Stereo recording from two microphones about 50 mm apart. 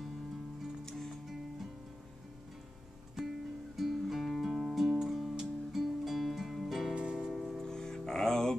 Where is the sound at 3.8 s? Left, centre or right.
Centre.